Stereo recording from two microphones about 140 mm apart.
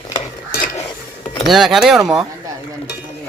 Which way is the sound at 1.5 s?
Centre (ahead or behind).